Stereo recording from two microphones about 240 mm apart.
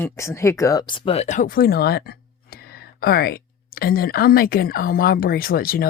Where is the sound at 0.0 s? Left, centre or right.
Centre.